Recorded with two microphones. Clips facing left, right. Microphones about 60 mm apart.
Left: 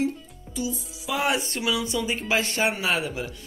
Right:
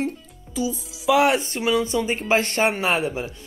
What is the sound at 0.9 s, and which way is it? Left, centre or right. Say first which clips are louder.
Music: right 14 dB; right.